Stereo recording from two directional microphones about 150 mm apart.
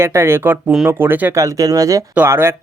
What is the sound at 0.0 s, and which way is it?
Speech, 20° right (ahead or behind).